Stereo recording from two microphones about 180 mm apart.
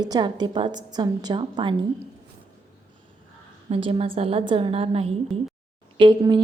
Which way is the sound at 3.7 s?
30° right (ahead or behind).